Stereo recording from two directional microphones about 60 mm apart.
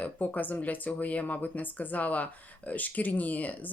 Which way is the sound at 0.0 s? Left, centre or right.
Left.